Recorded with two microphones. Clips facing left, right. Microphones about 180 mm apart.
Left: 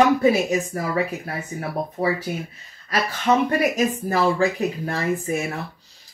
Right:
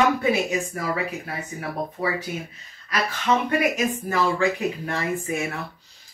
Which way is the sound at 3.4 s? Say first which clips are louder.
Left 2 dB; 35° left (ahead or behind).